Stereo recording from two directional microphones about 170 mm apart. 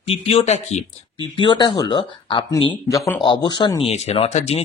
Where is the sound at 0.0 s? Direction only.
35° left (ahead or behind).